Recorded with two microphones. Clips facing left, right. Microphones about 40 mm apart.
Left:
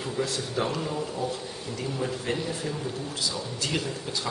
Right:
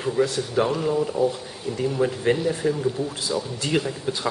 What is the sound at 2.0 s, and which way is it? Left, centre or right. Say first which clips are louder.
Speech: right 9 dB; right.